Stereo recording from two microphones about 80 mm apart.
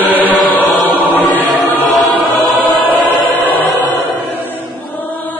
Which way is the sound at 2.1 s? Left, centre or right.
Left.